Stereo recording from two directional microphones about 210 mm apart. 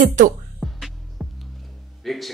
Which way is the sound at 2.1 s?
Centre (ahead or behind).